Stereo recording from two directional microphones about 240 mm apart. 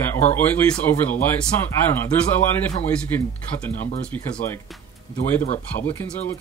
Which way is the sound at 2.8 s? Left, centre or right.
Centre.